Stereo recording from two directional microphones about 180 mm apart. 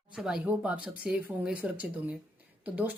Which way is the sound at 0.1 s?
5° right (ahead or behind).